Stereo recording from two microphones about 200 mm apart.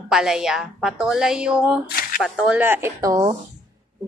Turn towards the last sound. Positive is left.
turn(degrees=-15)  # may be behind; listen again after turning